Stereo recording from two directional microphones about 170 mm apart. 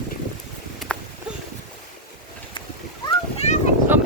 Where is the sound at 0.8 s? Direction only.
Centre (ahead or behind).